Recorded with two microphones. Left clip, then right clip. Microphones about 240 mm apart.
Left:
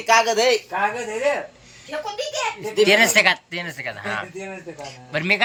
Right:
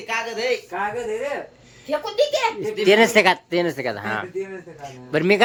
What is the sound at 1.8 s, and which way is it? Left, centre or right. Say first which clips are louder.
Speech: right 7 dB; right.